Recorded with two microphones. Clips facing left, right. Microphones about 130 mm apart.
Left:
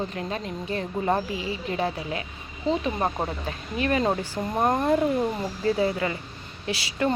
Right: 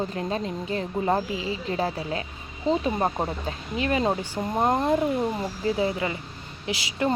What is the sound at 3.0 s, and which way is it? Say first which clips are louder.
Speech: right 1 dB; 10° right (ahead or behind).